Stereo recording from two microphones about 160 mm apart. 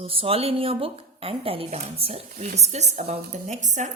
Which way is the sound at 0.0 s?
35° right (ahead or behind).